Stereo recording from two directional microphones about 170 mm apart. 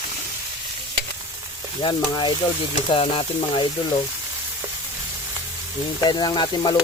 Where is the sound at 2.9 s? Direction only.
30° left (ahead or behind).